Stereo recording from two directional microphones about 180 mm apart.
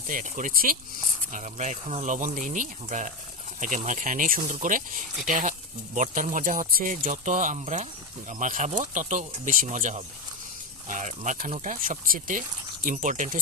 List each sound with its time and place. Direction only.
0.1 s speech: 45° right (ahead or behind)